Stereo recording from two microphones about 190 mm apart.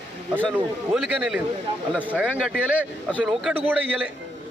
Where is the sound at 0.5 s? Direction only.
5° right (ahead or behind).